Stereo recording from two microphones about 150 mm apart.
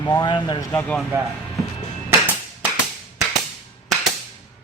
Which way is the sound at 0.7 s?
15° left (ahead or behind).